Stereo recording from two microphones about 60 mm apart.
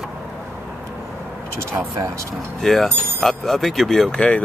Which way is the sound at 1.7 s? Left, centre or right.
Right.